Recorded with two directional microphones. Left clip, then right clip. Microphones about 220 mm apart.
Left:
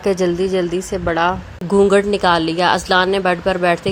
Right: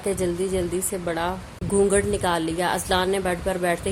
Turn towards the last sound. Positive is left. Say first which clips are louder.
# left 8 dB
turn(degrees=15)  # may be behind; listen again after turning